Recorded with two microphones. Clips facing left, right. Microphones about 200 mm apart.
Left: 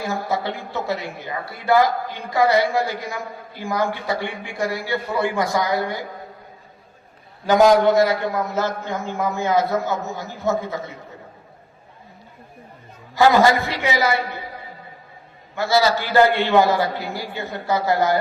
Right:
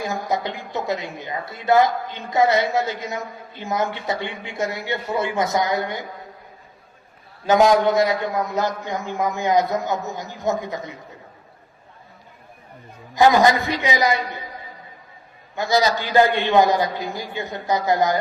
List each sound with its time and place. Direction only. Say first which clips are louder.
0.0 s a woman's voice: even; 20° right (ahead or behind)
7.4 s a man's voice: left 2 dB; 20° right (ahead or behind)
13.1 s a man's voice: even; 15° right (ahead or behind)
15.5 s a man's voice: left 1 dB; 15° right (ahead or behind)